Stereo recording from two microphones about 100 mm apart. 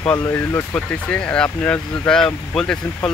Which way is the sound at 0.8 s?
10° left (ahead or behind).